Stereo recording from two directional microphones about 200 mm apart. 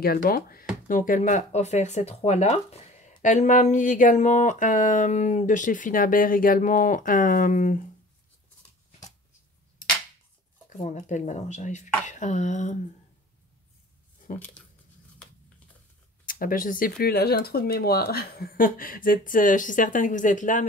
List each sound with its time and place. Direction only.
0.0 s speech: 50° left (ahead or behind)
10.8 s speech: 35° left (ahead or behind)
14.6 s tearing: 5° left (ahead or behind)
16.3 s speech: 45° left (ahead or behind)